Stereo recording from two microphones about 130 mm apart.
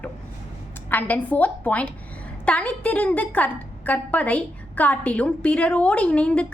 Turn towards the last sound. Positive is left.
turn(degrees=10)  # may be behind; listen again after turning